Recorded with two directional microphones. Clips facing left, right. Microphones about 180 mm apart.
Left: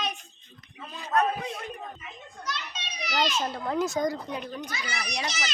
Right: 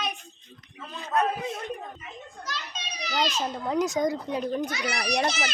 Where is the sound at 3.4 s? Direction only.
15° right (ahead or behind).